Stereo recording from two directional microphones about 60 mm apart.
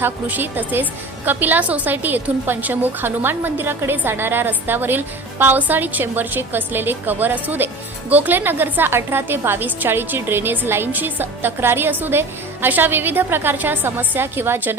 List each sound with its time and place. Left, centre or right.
0.0 s a woman's voice: right